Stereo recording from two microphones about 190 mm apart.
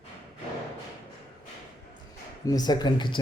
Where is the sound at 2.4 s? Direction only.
20° left (ahead or behind).